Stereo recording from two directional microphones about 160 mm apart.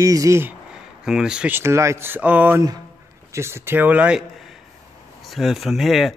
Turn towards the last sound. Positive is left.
turn(degrees=0)  # may be behind; listen again after turning